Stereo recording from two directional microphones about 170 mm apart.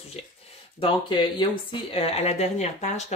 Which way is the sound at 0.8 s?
30° left (ahead or behind).